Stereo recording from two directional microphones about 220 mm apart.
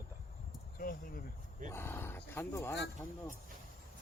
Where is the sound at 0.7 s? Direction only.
40° left (ahead or behind).